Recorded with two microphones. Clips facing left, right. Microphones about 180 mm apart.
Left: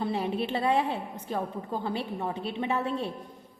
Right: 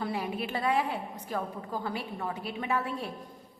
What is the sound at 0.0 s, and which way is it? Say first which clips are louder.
A woman's voice: left 4 dB; 25° left (ahead or behind).